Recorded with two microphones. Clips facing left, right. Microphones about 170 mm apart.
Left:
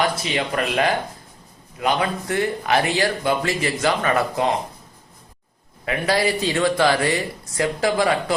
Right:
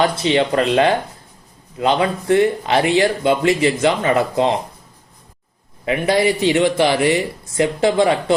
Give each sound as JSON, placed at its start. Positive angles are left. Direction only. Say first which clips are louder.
{"t": 0.0, "sound": "speech", "louder": "right 6 dB", "side_deg": -30}
{"t": 5.8, "sound": "speech", "louder": "right 4 dB", "side_deg": -20}